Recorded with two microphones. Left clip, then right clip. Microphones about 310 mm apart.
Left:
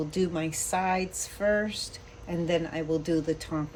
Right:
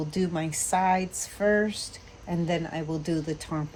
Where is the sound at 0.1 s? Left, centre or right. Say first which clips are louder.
Even; right.